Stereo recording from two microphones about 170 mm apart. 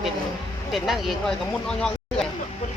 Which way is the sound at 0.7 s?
Centre (ahead or behind).